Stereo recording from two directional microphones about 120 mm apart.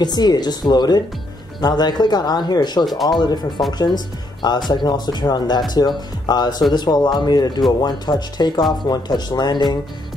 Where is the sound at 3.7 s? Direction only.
35° left (ahead or behind).